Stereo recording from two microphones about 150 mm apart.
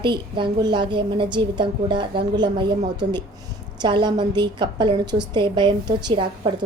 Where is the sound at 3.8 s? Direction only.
30° right (ahead or behind).